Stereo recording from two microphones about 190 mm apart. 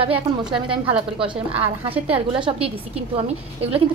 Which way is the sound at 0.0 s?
30° right (ahead or behind).